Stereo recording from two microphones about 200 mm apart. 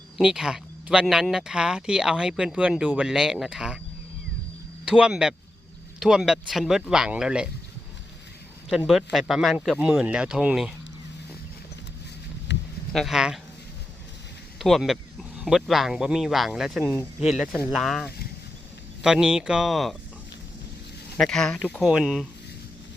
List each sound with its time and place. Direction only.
0.2 s speech: 5° right (ahead or behind)
4.9 s speech: 5° right (ahead or behind)
8.8 s speech: centre (ahead or behind)
12.5 s a sound: 60° left (ahead or behind)
12.9 s speech: centre (ahead or behind)
14.6 s speech: centre (ahead or behind)
21.2 s speech: 5° left (ahead or behind)